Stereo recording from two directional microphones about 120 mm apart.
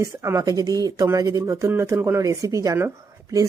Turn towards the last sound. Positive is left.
turn(degrees=-25)  # may be behind; listen again after turning